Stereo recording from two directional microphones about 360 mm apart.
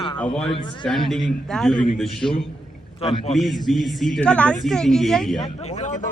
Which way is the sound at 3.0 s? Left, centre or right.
Centre.